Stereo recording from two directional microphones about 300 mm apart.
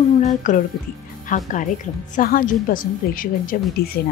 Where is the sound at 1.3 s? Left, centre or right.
Left.